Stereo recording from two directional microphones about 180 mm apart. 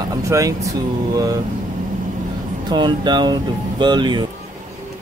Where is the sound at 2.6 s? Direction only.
25° right (ahead or behind).